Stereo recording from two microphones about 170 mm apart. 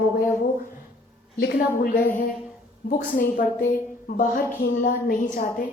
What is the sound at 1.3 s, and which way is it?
A woman's voice, 65° left (ahead or behind).